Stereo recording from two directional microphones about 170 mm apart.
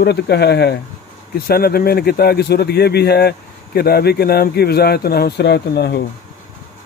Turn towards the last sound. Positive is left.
turn(degrees=70)  # may be behind; listen again after turning